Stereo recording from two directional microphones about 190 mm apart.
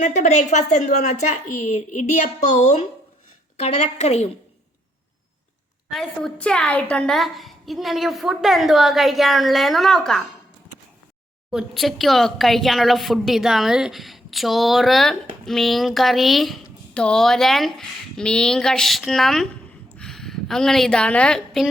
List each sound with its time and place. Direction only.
0.0 s a woman's voice: 40° left (ahead or behind)
5.9 s a woman's voice: centre (ahead or behind)
11.5 s a woman's voice: centre (ahead or behind)